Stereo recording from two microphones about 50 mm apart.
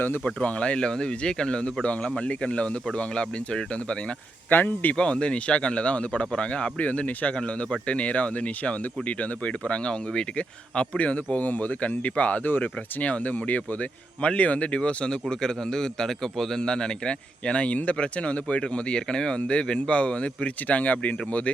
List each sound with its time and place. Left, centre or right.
0.4 s speech: left
4.4 s speech: left
4.9 s speech: centre